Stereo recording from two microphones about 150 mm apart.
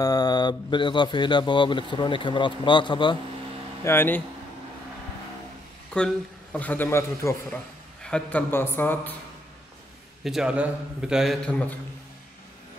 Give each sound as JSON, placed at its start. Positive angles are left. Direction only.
{"t": 0.0, "sound": "speech", "side_deg": 25}
{"t": 3.8, "sound": "a man's voice", "side_deg": 15}
{"t": 5.9, "sound": "a man's voice", "side_deg": 5}
{"t": 10.2, "sound": "a man's voice", "side_deg": -5}